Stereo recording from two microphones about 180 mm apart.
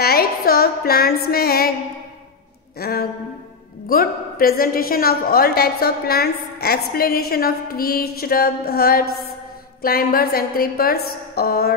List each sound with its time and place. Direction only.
0.0 s a woman's voice: 60° left (ahead or behind)
2.8 s a woman's voice: 55° left (ahead or behind)